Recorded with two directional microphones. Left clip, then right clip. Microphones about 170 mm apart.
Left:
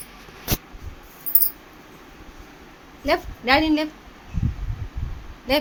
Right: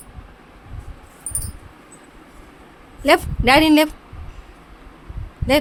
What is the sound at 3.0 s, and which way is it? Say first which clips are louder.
Speech: right 7 dB; 45° right (ahead or behind).